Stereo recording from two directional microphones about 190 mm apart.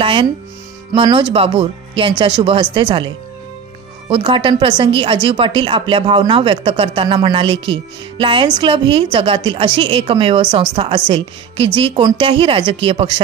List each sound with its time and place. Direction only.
0.0 s speech: 30° right (ahead or behind)
4.1 s speech: 25° right (ahead or behind)